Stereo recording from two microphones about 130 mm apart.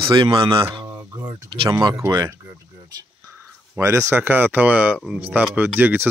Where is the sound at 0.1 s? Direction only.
35° right (ahead or behind).